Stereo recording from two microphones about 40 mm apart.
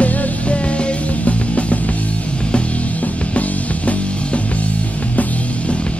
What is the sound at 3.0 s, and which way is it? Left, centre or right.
Music, left.